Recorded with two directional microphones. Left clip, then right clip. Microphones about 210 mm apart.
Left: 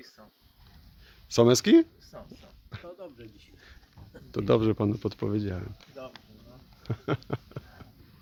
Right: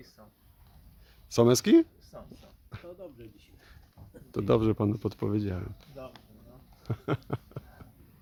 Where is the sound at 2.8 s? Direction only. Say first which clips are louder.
Left 1 dB; 35° left (ahead or behind).